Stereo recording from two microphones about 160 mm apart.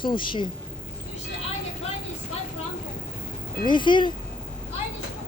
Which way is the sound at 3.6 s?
30° left (ahead or behind).